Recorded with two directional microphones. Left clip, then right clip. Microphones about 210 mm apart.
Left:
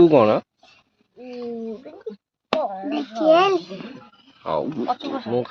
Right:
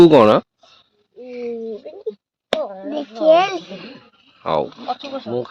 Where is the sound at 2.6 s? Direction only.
30° right (ahead or behind).